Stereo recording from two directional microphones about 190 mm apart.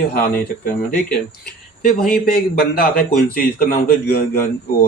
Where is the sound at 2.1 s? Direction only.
50° left (ahead or behind).